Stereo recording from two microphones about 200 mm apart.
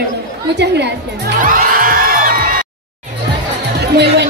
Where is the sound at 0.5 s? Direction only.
60° right (ahead or behind).